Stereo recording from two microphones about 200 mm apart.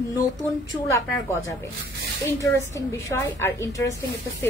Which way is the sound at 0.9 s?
15° left (ahead or behind).